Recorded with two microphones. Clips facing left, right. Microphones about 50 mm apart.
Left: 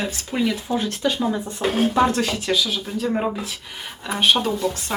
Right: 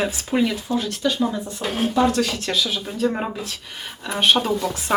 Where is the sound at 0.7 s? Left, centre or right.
Centre.